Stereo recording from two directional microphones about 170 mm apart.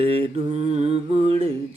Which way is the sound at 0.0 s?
35° right (ahead or behind).